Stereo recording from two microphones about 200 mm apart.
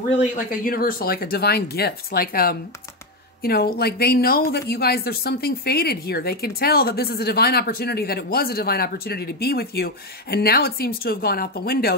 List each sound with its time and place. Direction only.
0.2 s speech: 40° left (ahead or behind)